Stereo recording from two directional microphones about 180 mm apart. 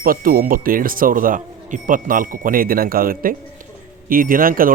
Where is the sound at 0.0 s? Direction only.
55° right (ahead or behind).